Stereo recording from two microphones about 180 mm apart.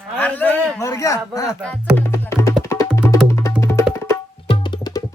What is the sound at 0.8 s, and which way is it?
Speech, 20° left (ahead or behind).